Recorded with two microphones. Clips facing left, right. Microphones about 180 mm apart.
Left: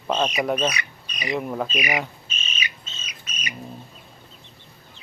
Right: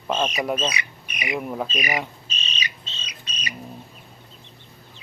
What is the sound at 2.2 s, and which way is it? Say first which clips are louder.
Bird: even; 35° right (ahead or behind).